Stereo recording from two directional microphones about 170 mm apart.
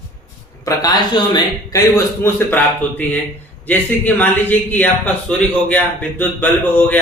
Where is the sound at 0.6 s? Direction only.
25° left (ahead or behind).